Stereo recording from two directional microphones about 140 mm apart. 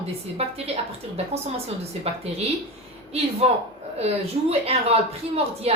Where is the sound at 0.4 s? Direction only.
45° right (ahead or behind).